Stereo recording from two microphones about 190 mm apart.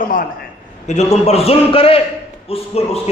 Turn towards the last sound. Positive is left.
turn(degrees=30)  # may be behind; listen again after turning